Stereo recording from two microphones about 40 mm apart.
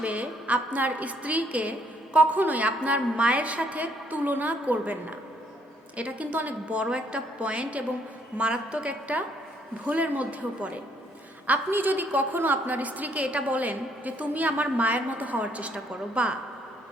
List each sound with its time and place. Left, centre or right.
0.0 s a woman's voice: right
6.3 s a woman's voice: right
6.7 s a woman's voice: right
11.7 s a woman's voice: right
15.7 s a woman's voice: right